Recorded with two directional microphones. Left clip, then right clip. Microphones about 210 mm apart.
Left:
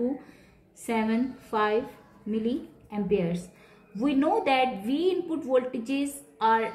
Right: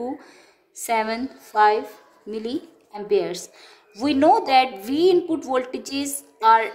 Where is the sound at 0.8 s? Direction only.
60° right (ahead or behind).